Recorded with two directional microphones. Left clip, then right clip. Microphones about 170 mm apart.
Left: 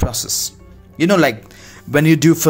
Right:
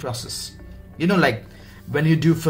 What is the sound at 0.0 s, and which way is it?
A man's voice, 60° left (ahead or behind).